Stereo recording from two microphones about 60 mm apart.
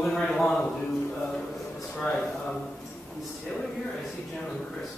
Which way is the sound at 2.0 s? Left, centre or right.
Centre.